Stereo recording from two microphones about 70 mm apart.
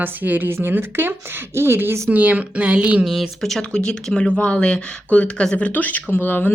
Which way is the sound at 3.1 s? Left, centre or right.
Centre.